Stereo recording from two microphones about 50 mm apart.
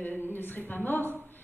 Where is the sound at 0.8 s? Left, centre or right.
Left.